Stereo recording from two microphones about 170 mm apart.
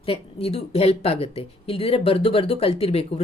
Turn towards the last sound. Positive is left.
turn(degrees=35)  # may be behind; listen again after turning